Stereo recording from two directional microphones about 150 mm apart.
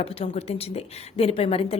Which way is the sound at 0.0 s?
40° left (ahead or behind).